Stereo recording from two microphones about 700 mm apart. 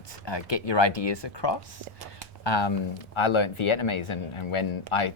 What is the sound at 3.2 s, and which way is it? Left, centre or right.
Speech, left.